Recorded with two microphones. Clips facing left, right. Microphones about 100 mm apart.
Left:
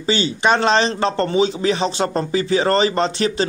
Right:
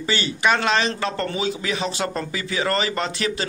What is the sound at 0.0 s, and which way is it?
Speech, 25° left (ahead or behind).